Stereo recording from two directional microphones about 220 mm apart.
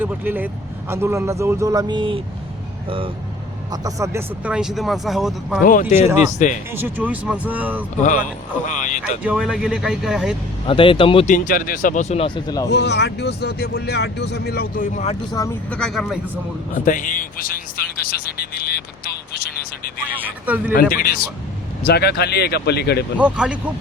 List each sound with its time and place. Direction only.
0.0 s a man's voice: 10° right (ahead or behind)
3.7 s speech: 15° right (ahead or behind)
6.1 s speech: 35° left (ahead or behind)
6.7 s a man's voice: 10° right (ahead or behind)
8.0 s speech: 35° left (ahead or behind)
9.2 s speech: 5° right (ahead or behind)
10.7 s speech: 25° left (ahead or behind)
11.3 s speech: 40° left (ahead or behind); by 12.6 s 20° left (ahead or behind)
12.6 s speech: 50° left (ahead or behind)
15.3 s speech: 15° left (ahead or behind)
16.7 s a man's voice: 35° left (ahead or behind)
20.1 s a man's voice: 10° right (ahead or behind)
20.9 s speech: 40° left (ahead or behind)
23.1 s speech: 5° right (ahead or behind)